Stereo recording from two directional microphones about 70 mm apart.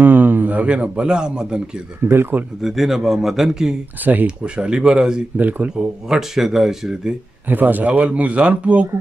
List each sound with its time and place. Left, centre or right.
0.0 s a man's voice: right; by 1.6 s centre
2.0 s speech: right
2.6 s a man's voice: centre
4.0 s speech: right
5.4 s speech: right
6.0 s speech: centre
7.4 s speech: right